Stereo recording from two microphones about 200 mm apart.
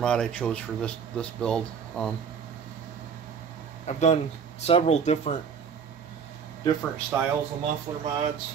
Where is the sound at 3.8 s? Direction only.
35° left (ahead or behind).